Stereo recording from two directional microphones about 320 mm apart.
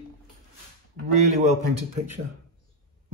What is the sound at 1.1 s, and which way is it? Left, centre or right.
Speech, right.